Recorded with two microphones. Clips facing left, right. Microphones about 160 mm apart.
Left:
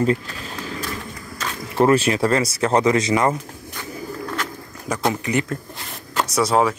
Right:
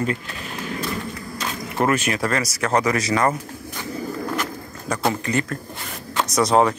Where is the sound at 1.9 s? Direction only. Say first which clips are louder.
Left 5 dB; 30° left (ahead or behind).